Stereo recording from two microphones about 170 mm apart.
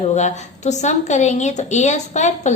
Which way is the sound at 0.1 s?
40° left (ahead or behind).